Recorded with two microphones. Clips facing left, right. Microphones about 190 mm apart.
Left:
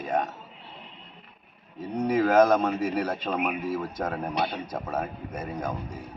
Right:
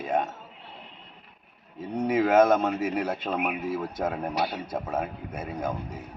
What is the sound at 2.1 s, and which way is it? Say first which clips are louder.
Speech: even; 5° right (ahead or behind).